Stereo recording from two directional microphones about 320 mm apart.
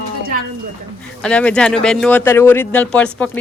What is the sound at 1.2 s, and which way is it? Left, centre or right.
Speech, centre.